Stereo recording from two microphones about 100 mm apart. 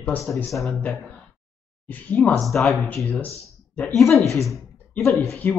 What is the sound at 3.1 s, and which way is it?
Speech, 15° left (ahead or behind).